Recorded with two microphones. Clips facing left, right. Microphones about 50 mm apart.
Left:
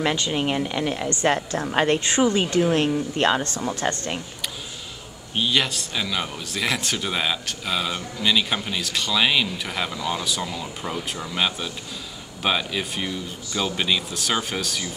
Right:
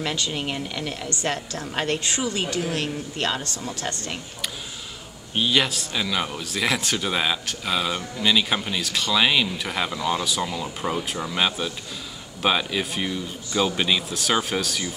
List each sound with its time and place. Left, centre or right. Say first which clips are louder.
0.0 s a woman's voice: left 4 dB; left
5.3 s speech: right 1 dB; centre